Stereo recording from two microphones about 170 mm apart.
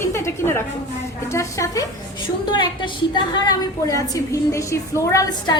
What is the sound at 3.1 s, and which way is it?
A woman's voice, 20° left (ahead or behind).